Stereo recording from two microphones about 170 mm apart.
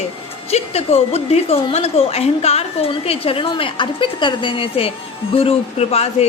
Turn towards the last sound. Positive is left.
turn(degrees=40)  # may be behind; listen again after turning